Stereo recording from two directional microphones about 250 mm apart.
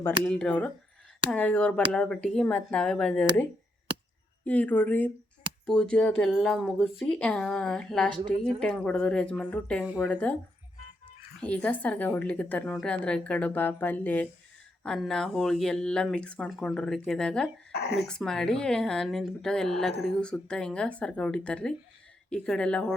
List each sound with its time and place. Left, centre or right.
0.3 s a woman's voice: centre
4.4 s a woman's voice: centre
10.1 s speech: centre
11.3 s a woman's voice: centre
17.7 s a sound: left
17.9 s a woman's voice: centre